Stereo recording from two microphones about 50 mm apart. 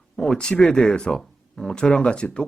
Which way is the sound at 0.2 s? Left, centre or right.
Centre.